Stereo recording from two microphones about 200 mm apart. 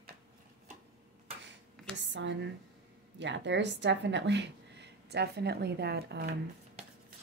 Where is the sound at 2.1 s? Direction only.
65° right (ahead or behind).